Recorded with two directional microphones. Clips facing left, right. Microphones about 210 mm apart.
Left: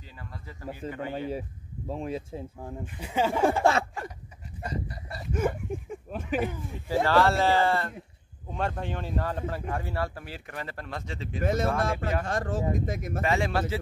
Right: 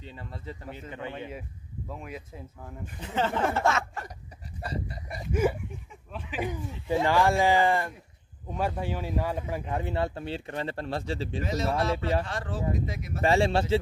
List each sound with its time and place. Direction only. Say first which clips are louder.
0.0 s speech: right 4 dB; 25° right (ahead or behind)
1.1 s speech: left 6 dB; 30° left (ahead or behind)
3.0 s speech: left 3 dB; 10° left (ahead or behind)
4.6 s a sound: even; 30° right (ahead or behind)
5.2 s a sound: right 2 dB; 10° right (ahead or behind)
5.7 s a sound: left 8 dB; 45° left (ahead or behind)
6.5 s speech: right 1 dB; 15° right (ahead or behind); by 11.4 s 30° right (ahead or behind)
11.4 s speech: left 2 dB; 50° left (ahead or behind)
13.2 s speech: right 4 dB; 30° right (ahead or behind)